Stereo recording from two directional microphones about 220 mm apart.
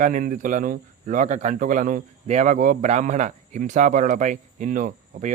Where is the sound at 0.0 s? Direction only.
35° right (ahead or behind).